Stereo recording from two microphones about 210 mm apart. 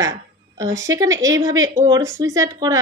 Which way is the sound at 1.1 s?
65° right (ahead or behind).